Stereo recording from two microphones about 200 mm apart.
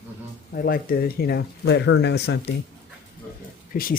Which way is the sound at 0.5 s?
50° left (ahead or behind).